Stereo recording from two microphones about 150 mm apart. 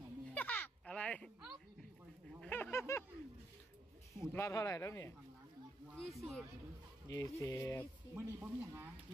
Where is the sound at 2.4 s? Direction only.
10° left (ahead or behind).